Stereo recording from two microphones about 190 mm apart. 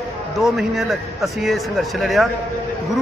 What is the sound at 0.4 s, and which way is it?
Speech, centre (ahead or behind).